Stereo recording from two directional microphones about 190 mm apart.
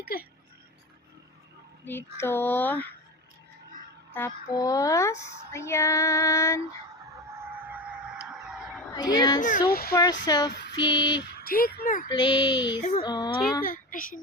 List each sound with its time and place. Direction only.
0.0 s speech: 55° left (ahead or behind)
1.8 s female singing: 10° left (ahead or behind)
4.1 s female singing: 15° left (ahead or behind)
7.4 s a sound: 10° right (ahead or behind)
8.9 s speech: 20° left (ahead or behind)
9.4 s speech: 40° left (ahead or behind)
9.9 s female singing: 15° left (ahead or behind)
10.2 s child singing: 20° left (ahead or behind)
10.5 s female singing: 65° left (ahead or behind)
10.8 s child singing: 25° left (ahead or behind)
11.2 s speech: 55° left (ahead or behind)
12.0 s child singing: 25° left (ahead or behind)
13.7 s a child's voice: 45° left (ahead or behind)